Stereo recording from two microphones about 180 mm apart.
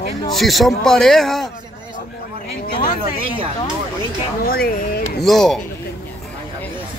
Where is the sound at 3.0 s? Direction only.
30° right (ahead or behind).